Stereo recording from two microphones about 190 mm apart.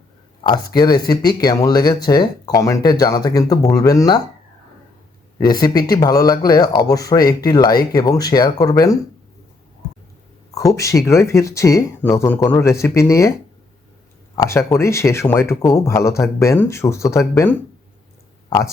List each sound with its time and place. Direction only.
0.4 s speech: 20° left (ahead or behind)
5.4 s speech: 20° left (ahead or behind)
10.5 s speech: 15° left (ahead or behind)
14.3 s speech: 15° left (ahead or behind)